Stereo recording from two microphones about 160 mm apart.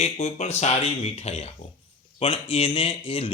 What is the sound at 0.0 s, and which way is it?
Speech, 40° left (ahead or behind).